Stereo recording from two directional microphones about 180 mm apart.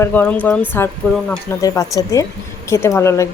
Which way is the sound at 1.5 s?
20° left (ahead or behind).